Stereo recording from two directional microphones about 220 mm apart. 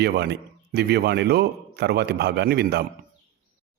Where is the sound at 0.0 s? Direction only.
50° right (ahead or behind).